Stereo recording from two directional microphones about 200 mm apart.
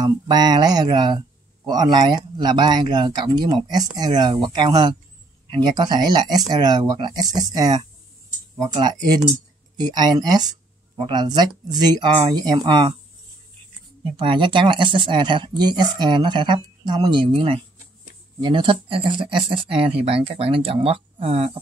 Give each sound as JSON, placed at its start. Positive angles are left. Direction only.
{"t": 0.0, "sound": "speech", "side_deg": -20}
{"t": 14.1, "sound": "speech", "side_deg": -25}